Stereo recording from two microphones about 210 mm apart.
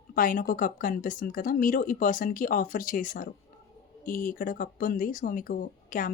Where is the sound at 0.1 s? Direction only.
40° left (ahead or behind).